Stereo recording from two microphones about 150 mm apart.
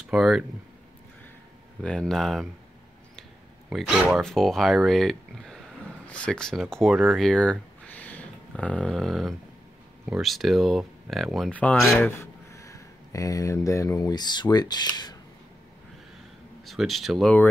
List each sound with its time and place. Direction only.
0.1 s speech: centre (ahead or behind)
1.8 s speech: 5° left (ahead or behind)
3.7 s speech: 5° right (ahead or behind)
12.2 s speech: 20° left (ahead or behind)
16.6 s speech: centre (ahead or behind)